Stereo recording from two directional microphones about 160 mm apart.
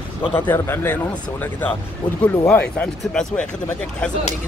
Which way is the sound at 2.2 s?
10° left (ahead or behind).